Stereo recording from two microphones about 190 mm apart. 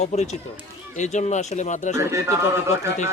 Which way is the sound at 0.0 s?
35° left (ahead or behind).